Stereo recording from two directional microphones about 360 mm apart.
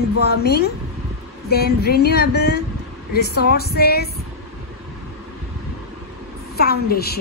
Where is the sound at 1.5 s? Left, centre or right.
Left.